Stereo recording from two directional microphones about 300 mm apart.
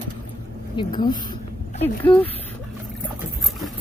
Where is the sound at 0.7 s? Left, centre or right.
Centre.